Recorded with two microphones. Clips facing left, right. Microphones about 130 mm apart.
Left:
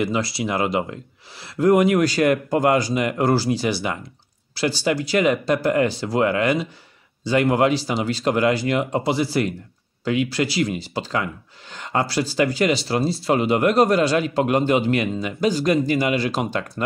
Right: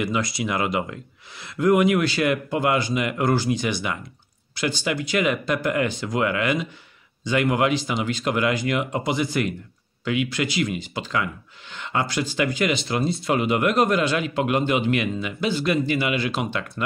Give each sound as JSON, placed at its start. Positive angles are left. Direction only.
{"t": 0.0, "sound": "speech", "side_deg": 30}